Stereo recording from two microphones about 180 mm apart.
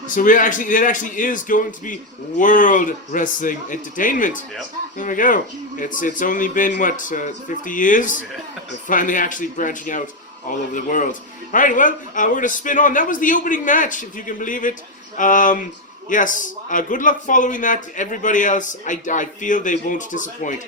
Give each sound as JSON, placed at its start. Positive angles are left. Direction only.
{"t": 0.2, "sound": "speech", "side_deg": 45}